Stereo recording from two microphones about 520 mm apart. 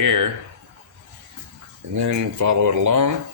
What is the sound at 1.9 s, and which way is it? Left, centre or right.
Speech, right.